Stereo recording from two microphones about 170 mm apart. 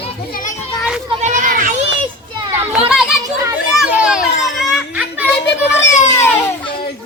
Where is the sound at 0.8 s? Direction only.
Centre (ahead or behind).